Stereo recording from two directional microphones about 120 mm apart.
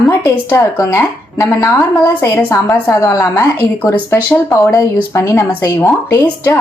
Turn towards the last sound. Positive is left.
turn(degrees=25)  # may be behind; listen again after turning